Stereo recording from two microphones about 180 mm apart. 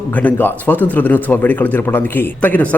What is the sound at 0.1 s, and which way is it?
A man's voice, 10° left (ahead or behind).